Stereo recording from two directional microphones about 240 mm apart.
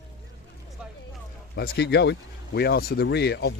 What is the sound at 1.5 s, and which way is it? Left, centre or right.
Speech, left.